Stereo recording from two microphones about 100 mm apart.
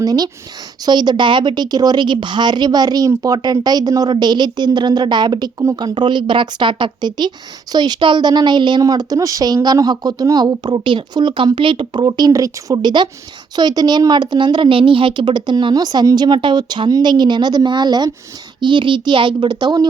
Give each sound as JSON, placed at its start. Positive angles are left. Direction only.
{"t": 0.0, "sound": "speech", "side_deg": -40}
{"t": 8.8, "sound": "speech", "side_deg": -40}